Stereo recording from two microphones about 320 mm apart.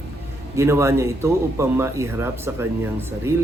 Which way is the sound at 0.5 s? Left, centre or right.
Centre.